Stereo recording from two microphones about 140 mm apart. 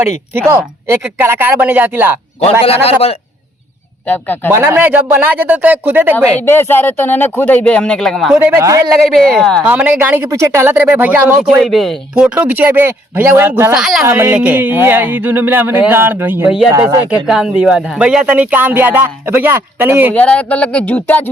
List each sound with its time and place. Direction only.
0.3 s speech: 20° right (ahead or behind)
2.8 s a man's voice: 45° left (ahead or behind)
4.0 s speech: 10° left (ahead or behind)
4.5 s speech: 15° right (ahead or behind)
6.1 s speech: 15° left (ahead or behind)
8.4 s speech: 15° right (ahead or behind)
9.3 s speech: 5° left (ahead or behind)
9.6 s speech: 10° right (ahead or behind)
13.7 s speech: centre (ahead or behind)
14.0 s speech: 20° right (ahead or behind)
20.1 s speech: 10° left (ahead or behind)